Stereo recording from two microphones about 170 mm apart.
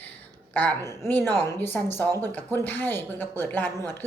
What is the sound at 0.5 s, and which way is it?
A woman's voice, 15° left (ahead or behind).